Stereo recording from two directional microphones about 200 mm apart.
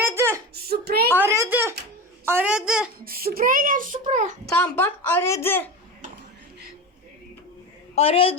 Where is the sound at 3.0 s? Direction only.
50° right (ahead or behind).